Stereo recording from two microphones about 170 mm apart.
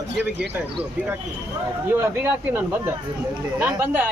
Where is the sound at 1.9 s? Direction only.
15° right (ahead or behind).